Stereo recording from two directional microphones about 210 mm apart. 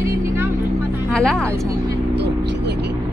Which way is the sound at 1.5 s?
15° right (ahead or behind).